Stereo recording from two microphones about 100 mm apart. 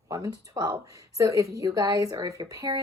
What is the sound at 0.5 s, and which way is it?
A woman's voice, 35° right (ahead or behind).